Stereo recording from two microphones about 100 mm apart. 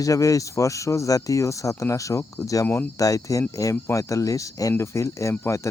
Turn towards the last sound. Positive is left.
turn(degrees=30)  # may be behind; listen again after turning